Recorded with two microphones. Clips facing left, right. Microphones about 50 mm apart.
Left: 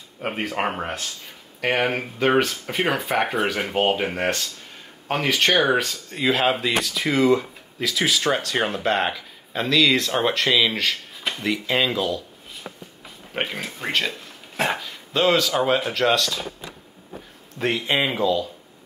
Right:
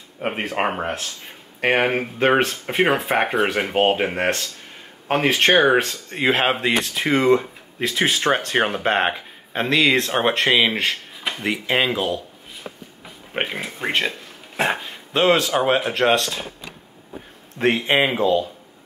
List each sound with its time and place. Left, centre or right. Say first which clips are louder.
0.4 s speech: right 1 dB; right
0.7 s speech: right 3 dB; centre
0.9 s speech: right 1 dB; right
13.0 s speech: right 2 dB; centre
17.6 s speech: right 4 dB; right